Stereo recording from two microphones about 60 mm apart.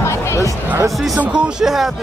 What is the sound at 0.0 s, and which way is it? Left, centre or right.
Music, left.